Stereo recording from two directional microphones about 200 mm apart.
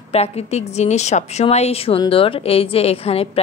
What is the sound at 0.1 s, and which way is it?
A woman's voice, 30° left (ahead or behind).